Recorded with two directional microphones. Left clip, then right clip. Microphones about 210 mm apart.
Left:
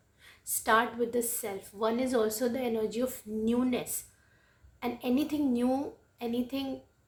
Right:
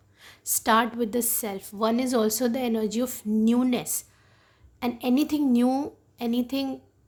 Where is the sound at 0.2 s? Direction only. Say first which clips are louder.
Right 8 dB; 55° right (ahead or behind).